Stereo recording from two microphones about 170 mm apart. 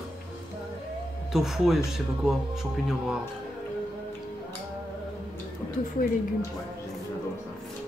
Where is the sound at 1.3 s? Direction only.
Centre (ahead or behind).